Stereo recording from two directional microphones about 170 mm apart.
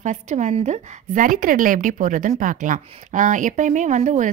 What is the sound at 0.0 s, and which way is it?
A woman's voice, 45° right (ahead or behind).